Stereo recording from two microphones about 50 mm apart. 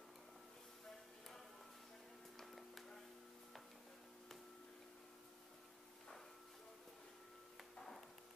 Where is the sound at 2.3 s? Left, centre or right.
Centre.